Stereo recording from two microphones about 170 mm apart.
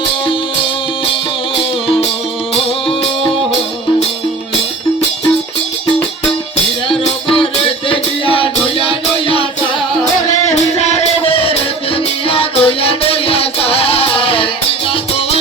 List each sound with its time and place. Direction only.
2.6 s music: 35° left (ahead or behind)
6.8 s music: 30° left (ahead or behind)
10.5 s music: 40° left (ahead or behind)